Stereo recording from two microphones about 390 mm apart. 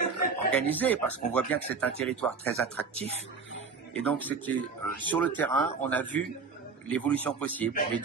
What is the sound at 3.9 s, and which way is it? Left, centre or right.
Speech, centre.